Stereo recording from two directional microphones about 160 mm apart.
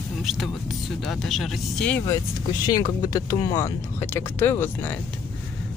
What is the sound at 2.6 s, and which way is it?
Speech, 25° left (ahead or behind).